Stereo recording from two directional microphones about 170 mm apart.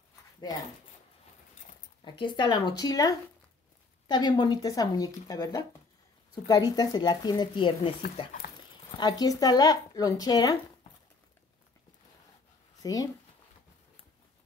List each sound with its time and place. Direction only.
2.0 s speech: 25° left (ahead or behind)
8.9 s speech: 25° left (ahead or behind)
12.8 s speech: 20° left (ahead or behind)